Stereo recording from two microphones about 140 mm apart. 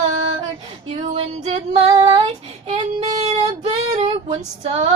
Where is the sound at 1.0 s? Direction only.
55° right (ahead or behind).